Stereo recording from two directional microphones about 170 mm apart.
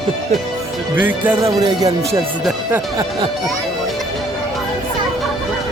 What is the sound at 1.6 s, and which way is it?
Speech, 20° right (ahead or behind).